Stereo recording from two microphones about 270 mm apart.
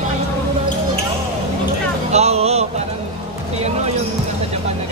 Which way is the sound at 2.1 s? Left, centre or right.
Right.